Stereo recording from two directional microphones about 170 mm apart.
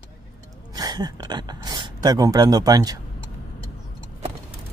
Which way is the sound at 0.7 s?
20° right (ahead or behind).